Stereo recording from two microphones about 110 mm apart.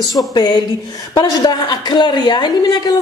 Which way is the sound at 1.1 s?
40° left (ahead or behind).